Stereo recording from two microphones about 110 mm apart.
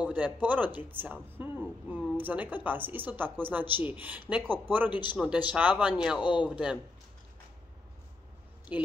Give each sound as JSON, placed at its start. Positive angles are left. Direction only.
{"t": 0.0, "sound": "a sound", "side_deg": -15}
{"t": 0.7, "sound": "speech", "side_deg": -15}
{"t": 8.7, "sound": "speech", "side_deg": -15}